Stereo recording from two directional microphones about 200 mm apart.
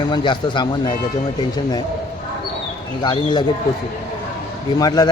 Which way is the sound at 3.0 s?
25° left (ahead or behind).